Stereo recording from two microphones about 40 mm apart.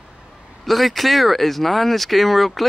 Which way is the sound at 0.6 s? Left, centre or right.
Centre.